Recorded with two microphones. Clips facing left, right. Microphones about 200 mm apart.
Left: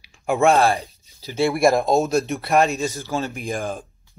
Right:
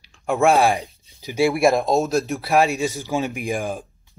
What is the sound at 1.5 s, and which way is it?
Speech, centre (ahead or behind).